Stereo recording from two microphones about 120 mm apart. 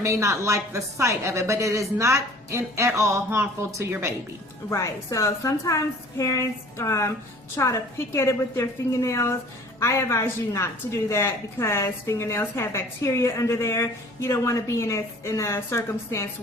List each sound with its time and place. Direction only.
0.0 s speech: 25° right (ahead or behind)
4.7 s a woman's voice: 25° left (ahead or behind)